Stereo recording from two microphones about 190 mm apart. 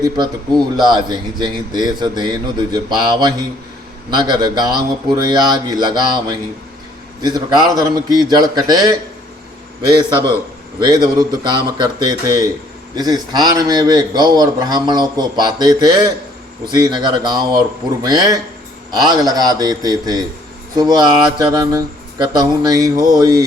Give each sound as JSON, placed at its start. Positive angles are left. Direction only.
{"t": 0.8, "sound": "a man's voice", "side_deg": -25}